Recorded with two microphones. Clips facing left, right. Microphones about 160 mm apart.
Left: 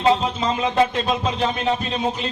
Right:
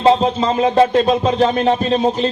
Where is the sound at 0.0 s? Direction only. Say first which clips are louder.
Right 5 dB; 35° right (ahead or behind).